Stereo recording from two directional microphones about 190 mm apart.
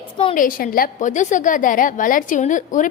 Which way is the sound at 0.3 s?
50° left (ahead or behind).